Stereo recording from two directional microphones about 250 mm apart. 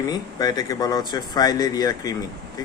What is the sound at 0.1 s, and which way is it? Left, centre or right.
Speech, centre.